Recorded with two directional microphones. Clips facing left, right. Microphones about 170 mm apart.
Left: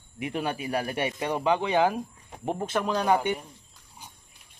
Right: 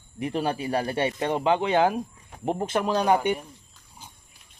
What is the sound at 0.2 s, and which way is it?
Speech, 35° right (ahead or behind).